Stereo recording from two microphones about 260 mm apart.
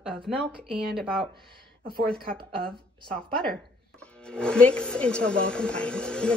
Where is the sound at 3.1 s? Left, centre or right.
Centre.